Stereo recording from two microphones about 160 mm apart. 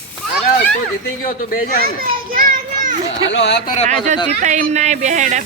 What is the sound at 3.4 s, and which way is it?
Speech, 90° left.